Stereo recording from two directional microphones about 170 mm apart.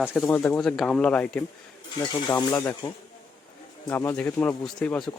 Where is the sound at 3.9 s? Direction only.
15° left (ahead or behind).